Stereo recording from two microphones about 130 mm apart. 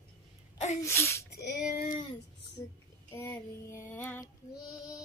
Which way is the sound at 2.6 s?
25° left (ahead or behind).